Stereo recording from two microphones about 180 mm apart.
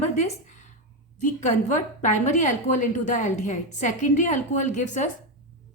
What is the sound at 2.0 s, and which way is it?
A woman's voice, 40° left (ahead or behind).